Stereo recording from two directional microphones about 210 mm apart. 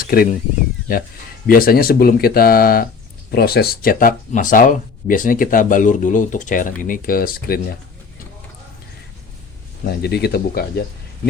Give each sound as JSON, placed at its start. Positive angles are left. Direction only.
{"t": 0.0, "sound": "speech", "side_deg": 45}
{"t": 1.5, "sound": "speech", "side_deg": 45}
{"t": 9.8, "sound": "speech", "side_deg": 50}